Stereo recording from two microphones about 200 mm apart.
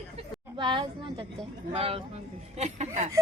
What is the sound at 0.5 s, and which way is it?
A woman's voice, 25° right (ahead or behind).